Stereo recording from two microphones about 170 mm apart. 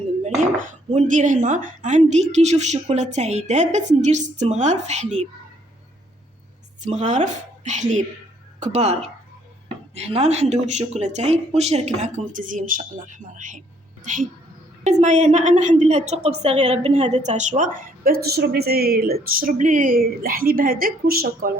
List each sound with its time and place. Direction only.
0.2 s a woman's voice: 40° right (ahead or behind)
6.8 s a woman's voice: 45° right (ahead or behind); by 21.5 s 60° right (ahead or behind)